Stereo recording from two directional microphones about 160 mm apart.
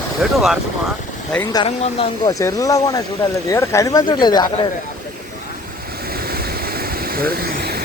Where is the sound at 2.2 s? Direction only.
20° left (ahead or behind).